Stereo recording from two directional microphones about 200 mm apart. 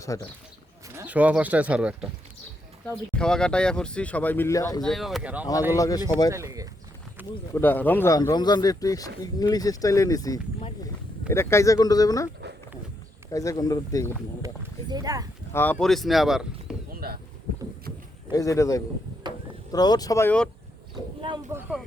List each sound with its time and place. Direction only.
0.1 s speech: 15° left (ahead or behind)
0.9 s speech: 10° right (ahead or behind); by 4.8 s 15° left (ahead or behind)
4.8 s speech: centre (ahead or behind)
5.7 s speech: 15° left (ahead or behind)
6.3 s speech: 15° right (ahead or behind)
7.5 s speech: 10° left (ahead or behind)
13.3 s speech: 15° left (ahead or behind)
14.4 s speech: 20° right (ahead or behind)
15.5 s speech: 10° left (ahead or behind)
17.0 s boat: 50° right (ahead or behind)
18.3 s speech: 15° left (ahead or behind)
21.2 s a sound: 25° right (ahead or behind)
21.5 s speech: 5° right (ahead or behind)